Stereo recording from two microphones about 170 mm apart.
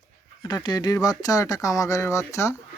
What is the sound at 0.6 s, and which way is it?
Speech, 25° left (ahead or behind).